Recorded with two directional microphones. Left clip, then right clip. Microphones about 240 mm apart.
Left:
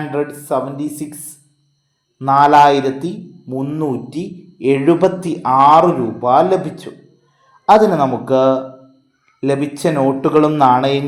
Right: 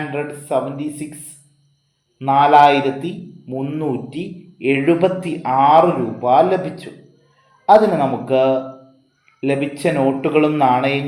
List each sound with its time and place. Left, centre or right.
0.1 s a man's voice: left